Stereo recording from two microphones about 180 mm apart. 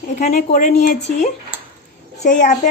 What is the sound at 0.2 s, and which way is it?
A woman's voice, 40° left (ahead or behind).